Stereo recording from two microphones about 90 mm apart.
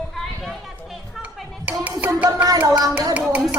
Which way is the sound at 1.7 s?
15° right (ahead or behind).